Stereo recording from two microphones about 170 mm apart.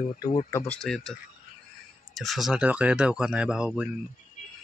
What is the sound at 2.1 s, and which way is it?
Speech, centre (ahead or behind).